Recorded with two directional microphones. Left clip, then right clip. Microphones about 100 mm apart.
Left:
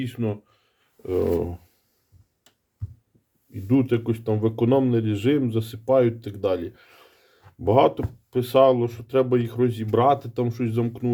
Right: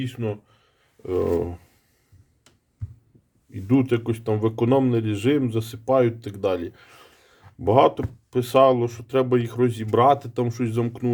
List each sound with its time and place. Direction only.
0.0 s speech: centre (ahead or behind)
1.0 s speech: 25° right (ahead or behind)
3.5 s speech: 30° right (ahead or behind)